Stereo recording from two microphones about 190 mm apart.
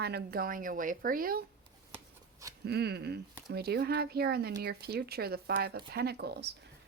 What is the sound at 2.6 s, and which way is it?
A woman's voice, 55° right (ahead or behind).